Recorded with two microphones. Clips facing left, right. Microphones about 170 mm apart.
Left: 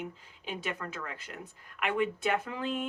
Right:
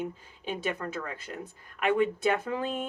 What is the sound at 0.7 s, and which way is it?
Speech, 35° right (ahead or behind).